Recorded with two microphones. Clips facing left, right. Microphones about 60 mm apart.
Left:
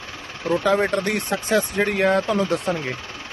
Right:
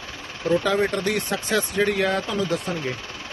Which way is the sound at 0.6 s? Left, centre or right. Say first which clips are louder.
Left 2 dB; left.